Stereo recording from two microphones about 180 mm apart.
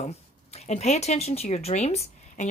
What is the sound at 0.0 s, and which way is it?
A woman's voice, 35° left (ahead or behind).